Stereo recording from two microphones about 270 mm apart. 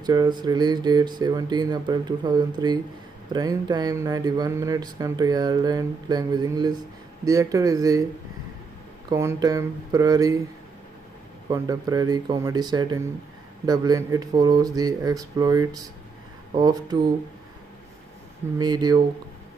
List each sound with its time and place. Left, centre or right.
0.0 s speech: centre
9.1 s speech: centre
11.4 s speech: centre
18.6 s speech: centre